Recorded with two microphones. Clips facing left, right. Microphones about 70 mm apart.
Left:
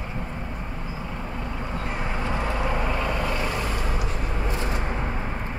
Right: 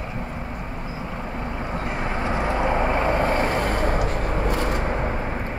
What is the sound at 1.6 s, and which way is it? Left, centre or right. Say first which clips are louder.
Vehicle: right 3 dB; centre.